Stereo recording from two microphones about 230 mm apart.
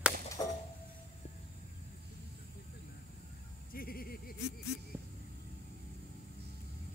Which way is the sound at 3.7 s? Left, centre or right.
Left.